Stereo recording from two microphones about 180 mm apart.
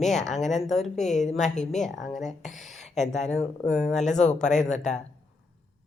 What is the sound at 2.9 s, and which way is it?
A woman's voice, centre (ahead or behind).